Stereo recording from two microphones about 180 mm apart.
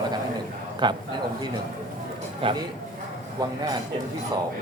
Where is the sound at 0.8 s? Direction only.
25° right (ahead or behind).